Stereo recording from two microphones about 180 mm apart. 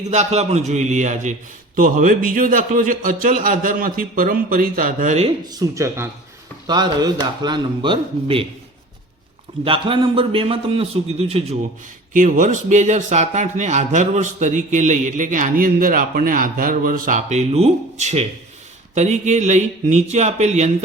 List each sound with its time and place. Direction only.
0.1 s speech: 40° right (ahead or behind)
5.5 s speech: 20° right (ahead or behind)
9.6 s a man's voice: 30° right (ahead or behind)
12.1 s a man's voice: 45° right (ahead or behind)